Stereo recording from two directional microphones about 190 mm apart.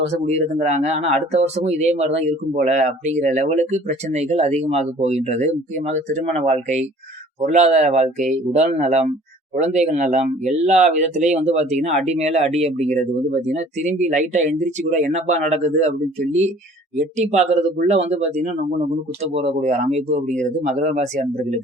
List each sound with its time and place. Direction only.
0.3 s speech: 35° right (ahead or behind)
17.2 s speech: 40° right (ahead or behind)